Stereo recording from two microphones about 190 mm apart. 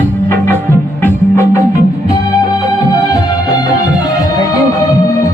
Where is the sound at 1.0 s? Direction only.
15° left (ahead or behind).